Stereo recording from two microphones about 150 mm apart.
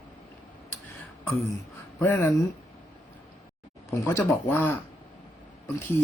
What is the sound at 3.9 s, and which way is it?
Speech, 20° left (ahead or behind).